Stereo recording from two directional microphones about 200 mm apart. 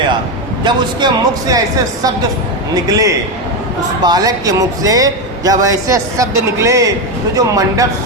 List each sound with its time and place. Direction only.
0.6 s a man's voice: 20° right (ahead or behind)